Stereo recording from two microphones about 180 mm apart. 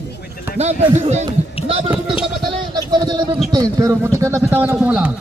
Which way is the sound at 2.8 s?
25° right (ahead or behind).